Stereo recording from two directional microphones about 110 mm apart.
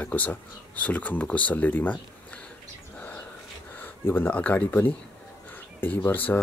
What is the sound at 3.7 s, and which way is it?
Speech, 20° left (ahead or behind).